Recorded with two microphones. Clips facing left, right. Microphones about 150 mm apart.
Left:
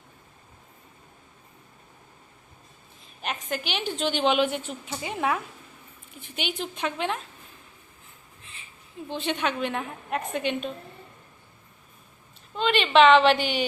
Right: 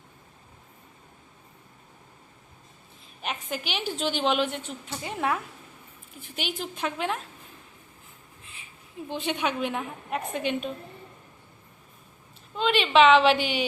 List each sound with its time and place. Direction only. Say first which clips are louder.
3.2 s a woman's voice: left 2 dB; centre (ahead or behind)
9.0 s a woman's voice: left 1 dB; 10° right (ahead or behind)
12.5 s a woman's voice: left 1 dB; 5° right (ahead or behind)